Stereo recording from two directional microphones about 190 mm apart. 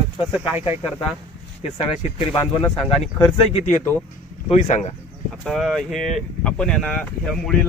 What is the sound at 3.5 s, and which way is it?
Speech, 35° left (ahead or behind).